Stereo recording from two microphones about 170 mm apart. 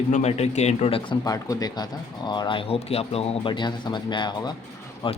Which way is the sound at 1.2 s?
20° left (ahead or behind).